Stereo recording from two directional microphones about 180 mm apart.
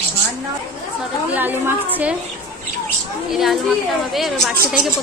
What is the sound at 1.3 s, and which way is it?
Speech, 10° right (ahead or behind).